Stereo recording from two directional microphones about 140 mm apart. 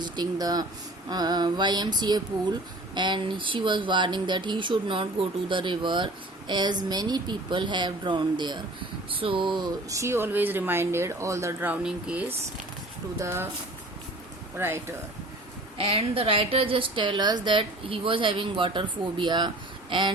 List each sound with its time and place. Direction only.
0.0 s speech: 30° right (ahead or behind)
9.9 s speech: 20° right (ahead or behind)
13.1 s speech: 20° right (ahead or behind)
14.6 s speech: 15° right (ahead or behind)
15.8 s speech: 40° right (ahead or behind)